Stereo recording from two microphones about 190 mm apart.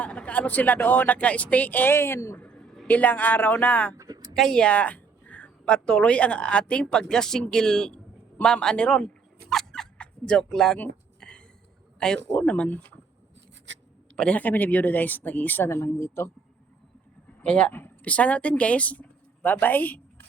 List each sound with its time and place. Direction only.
0.0 s speech: 5° left (ahead or behind)
3.9 s a sound: 20° right (ahead or behind)
4.4 s a woman's voice: 5° left (ahead or behind)
9.5 s a sound: centre (ahead or behind)
11.9 s a man's voice: 5° left (ahead or behind)
13.7 s writing: 75° right (ahead or behind)
14.2 s speech: 5° left (ahead or behind)
17.4 s speech: 5° left (ahead or behind)